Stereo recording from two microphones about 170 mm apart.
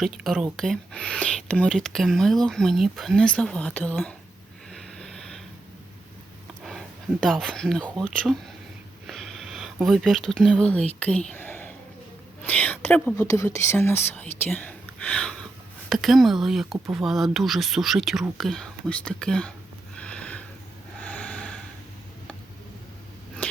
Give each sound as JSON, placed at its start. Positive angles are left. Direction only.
{"t": 0.0, "sound": "speech", "side_deg": 0}
{"t": 4.7, "sound": "a sound", "side_deg": 5}
{"t": 6.7, "sound": "speech", "side_deg": 0}
{"t": 9.0, "sound": "speech", "side_deg": 0}
{"t": 20.0, "sound": "sniff", "side_deg": 5}
{"t": 21.0, "sound": "snort", "side_deg": 10}
{"t": 23.4, "sound": "a sound", "side_deg": 10}